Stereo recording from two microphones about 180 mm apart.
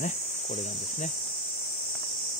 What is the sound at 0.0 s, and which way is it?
Cricket, 45° left (ahead or behind).